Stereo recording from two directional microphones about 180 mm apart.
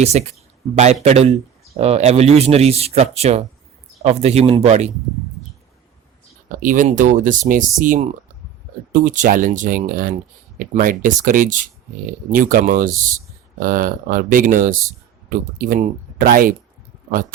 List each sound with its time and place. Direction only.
0.0 s speech: 40° right (ahead or behind)
6.6 s speech: 45° right (ahead or behind)